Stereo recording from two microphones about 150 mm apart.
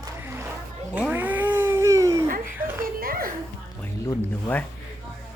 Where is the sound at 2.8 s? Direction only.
75° right (ahead or behind).